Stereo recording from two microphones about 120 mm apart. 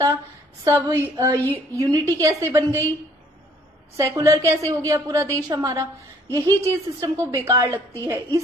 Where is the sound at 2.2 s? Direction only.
25° right (ahead or behind).